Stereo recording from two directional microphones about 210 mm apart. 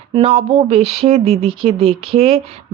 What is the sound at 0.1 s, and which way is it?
Speech, 30° right (ahead or behind).